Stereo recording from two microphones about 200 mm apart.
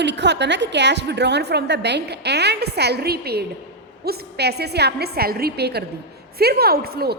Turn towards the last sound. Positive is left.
turn(degrees=-50)  # may be behind; listen again after turning